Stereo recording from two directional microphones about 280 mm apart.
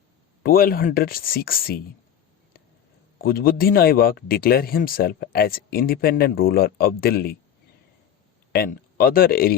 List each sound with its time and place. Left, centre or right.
0.4 s speech: left
3.2 s speech: left
8.5 s speech: left